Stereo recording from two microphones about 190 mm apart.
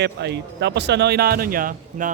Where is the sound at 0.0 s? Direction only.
65° right (ahead or behind).